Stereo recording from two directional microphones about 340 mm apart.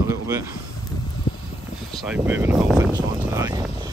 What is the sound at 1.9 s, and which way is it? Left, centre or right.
Vehicle, centre.